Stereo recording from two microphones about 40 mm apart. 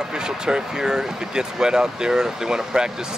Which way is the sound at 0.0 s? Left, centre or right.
Centre.